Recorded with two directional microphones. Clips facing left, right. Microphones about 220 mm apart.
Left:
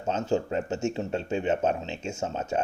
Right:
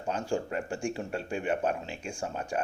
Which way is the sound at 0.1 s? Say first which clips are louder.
Left 4 dB; 25° left (ahead or behind).